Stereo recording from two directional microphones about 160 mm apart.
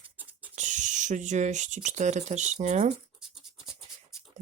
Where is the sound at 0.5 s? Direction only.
50° right (ahead or behind).